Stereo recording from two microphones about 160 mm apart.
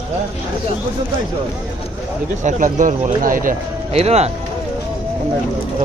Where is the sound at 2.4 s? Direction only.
50° right (ahead or behind).